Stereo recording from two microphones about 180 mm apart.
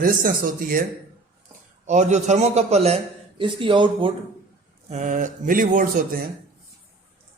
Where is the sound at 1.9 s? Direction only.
40° right (ahead or behind).